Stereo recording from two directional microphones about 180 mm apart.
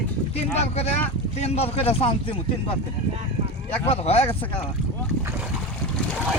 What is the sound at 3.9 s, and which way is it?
Speech, 35° left (ahead or behind).